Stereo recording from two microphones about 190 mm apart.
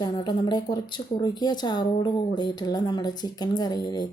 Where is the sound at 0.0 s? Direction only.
20° left (ahead or behind).